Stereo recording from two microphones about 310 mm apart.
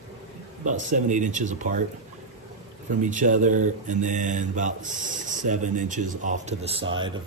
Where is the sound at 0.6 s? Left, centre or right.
Right.